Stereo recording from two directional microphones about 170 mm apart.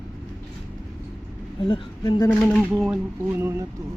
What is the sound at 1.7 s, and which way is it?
Speech, 25° left (ahead or behind).